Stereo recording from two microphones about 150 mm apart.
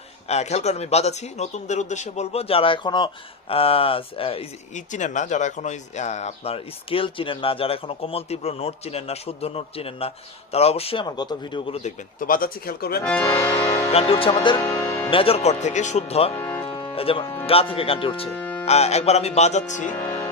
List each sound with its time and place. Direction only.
0.3 s speech: 45° left (ahead or behind)
4.7 s speech: 55° left (ahead or behind)
11.0 s speech: 30° left (ahead or behind)
11.8 s speech: 70° left (ahead or behind); by 13.0 s 90° left
13.0 s speech: 10° left (ahead or behind)
13.3 s accordion: 25° left (ahead or behind)
14.1 s speech: 40° left (ahead or behind)
14.5 s music: 20° left (ahead or behind)
15.1 s speech: 40° left (ahead or behind)
16.3 s music: 20° left (ahead or behind)
16.6 s music: 35° left (ahead or behind)
17.4 s speech: 40° left (ahead or behind)
18.3 s music: 10° left (ahead or behind)
18.6 s speech: 45° left (ahead or behind)